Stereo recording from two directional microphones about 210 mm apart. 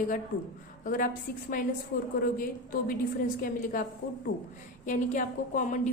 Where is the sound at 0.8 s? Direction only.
40° left (ahead or behind).